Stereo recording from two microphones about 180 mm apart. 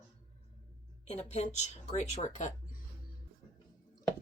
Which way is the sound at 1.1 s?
40° left (ahead or behind).